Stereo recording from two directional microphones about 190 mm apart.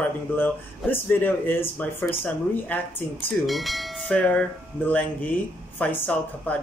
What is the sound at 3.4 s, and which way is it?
Speech, centre (ahead or behind).